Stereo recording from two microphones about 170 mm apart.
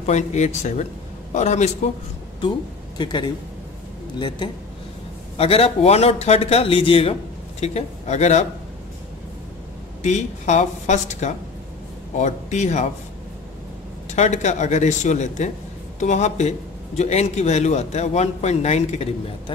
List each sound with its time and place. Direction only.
0.0 s speech: 40° left (ahead or behind)
3.0 s a man's voice: 25° left (ahead or behind)
5.4 s a man's voice: 35° left (ahead or behind)
10.0 s speech: 45° left (ahead or behind)
14.1 s a man's voice: 45° left (ahead or behind)